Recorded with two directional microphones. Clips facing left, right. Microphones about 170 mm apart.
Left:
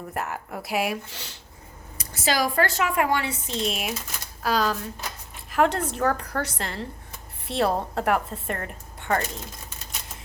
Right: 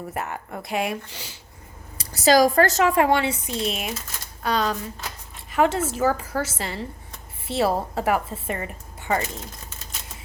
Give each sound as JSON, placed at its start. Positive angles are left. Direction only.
{"t": 0.1, "sound": "a woman's voice", "side_deg": 0}
{"t": 2.0, "sound": "a woman's voice", "side_deg": -40}
{"t": 3.4, "sound": "a woman's voice", "side_deg": 0}